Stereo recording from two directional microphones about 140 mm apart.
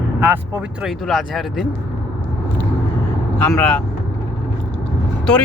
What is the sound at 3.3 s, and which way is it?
Speech, 5° left (ahead or behind).